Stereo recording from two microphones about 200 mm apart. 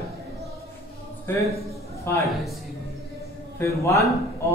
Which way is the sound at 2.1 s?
15° left (ahead or behind).